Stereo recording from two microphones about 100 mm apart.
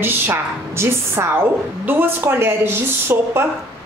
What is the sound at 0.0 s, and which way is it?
A woman's voice, 25° right (ahead or behind).